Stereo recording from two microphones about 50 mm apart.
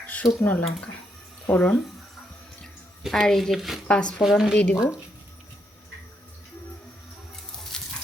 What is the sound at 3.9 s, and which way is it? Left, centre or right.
Speech, centre.